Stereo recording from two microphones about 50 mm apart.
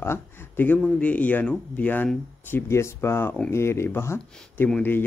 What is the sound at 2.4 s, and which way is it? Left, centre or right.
Speech, left.